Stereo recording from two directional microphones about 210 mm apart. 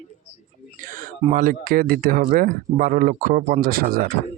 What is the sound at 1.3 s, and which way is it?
Speech, 40° right (ahead or behind).